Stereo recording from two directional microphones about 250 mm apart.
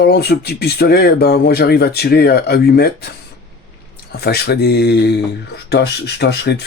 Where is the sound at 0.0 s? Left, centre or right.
Left.